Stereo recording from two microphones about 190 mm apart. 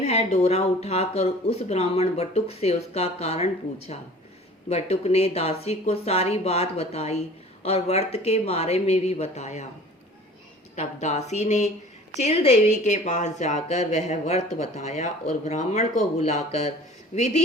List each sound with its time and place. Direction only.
0.0 s a woman's voice: 35° left (ahead or behind)
10.8 s a woman's voice: 35° left (ahead or behind)